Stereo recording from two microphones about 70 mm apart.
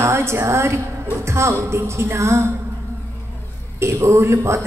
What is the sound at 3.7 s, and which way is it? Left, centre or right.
Speech, right.